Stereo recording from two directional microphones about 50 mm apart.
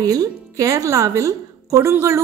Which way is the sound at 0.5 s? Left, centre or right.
Right.